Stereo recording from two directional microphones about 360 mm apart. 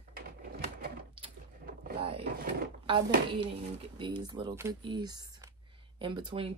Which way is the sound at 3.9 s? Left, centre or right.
Centre.